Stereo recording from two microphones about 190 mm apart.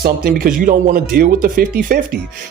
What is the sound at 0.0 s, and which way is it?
Speech, 50° right (ahead or behind).